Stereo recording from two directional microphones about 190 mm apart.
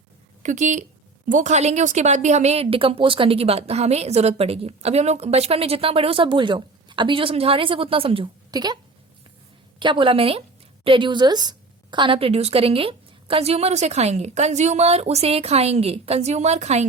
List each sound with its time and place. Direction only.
0.4 s a woman's voice: 40° right (ahead or behind)